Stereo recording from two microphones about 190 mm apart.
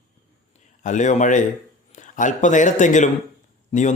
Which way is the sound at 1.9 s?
40° left (ahead or behind).